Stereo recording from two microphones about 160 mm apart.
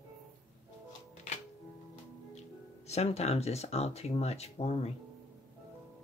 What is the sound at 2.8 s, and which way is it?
Speech, 40° left (ahead or behind).